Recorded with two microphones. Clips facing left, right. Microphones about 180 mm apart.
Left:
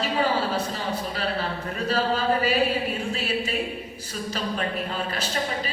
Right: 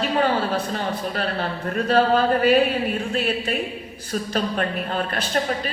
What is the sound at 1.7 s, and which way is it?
Speech, 55° right (ahead or behind).